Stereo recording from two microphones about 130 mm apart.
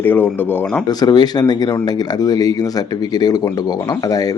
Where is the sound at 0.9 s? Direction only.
30° left (ahead or behind).